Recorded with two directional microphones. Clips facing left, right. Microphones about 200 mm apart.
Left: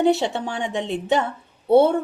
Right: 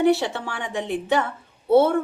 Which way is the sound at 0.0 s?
20° left (ahead or behind).